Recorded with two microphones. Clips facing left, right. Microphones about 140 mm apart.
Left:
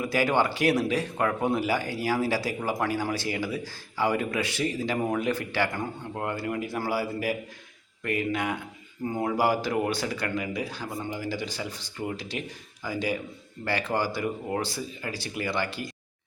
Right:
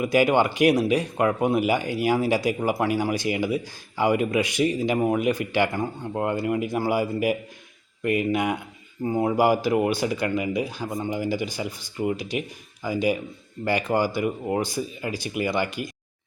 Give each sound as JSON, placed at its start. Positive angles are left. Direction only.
{"t": 0.0, "sound": "speech", "side_deg": -15}